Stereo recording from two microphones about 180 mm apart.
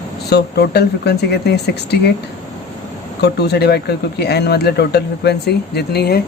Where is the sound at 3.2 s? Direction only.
65° left (ahead or behind).